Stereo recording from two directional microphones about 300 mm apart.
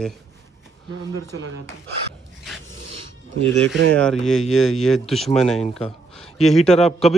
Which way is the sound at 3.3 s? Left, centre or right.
Right.